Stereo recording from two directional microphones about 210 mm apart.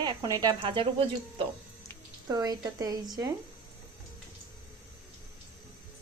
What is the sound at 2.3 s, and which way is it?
Speech, 15° right (ahead or behind).